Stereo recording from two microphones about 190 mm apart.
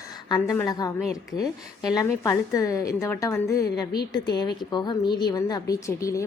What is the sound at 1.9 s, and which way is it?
A woman's voice, 15° left (ahead or behind).